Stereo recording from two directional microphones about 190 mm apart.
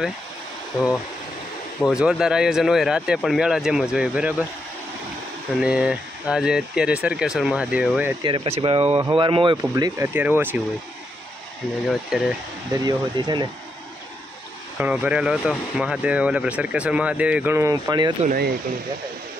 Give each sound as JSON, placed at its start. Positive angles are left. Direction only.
{"t": 0.7, "sound": "speech", "side_deg": 0}
{"t": 5.6, "sound": "speech", "side_deg": -5}
{"t": 8.2, "sound": "speech", "side_deg": -30}
{"t": 11.9, "sound": "speech", "side_deg": 0}
{"t": 12.7, "sound": "speech", "side_deg": -20}
{"t": 14.8, "sound": "speech", "side_deg": -5}